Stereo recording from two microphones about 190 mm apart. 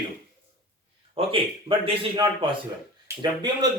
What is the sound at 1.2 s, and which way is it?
A man's voice, 30° right (ahead or behind).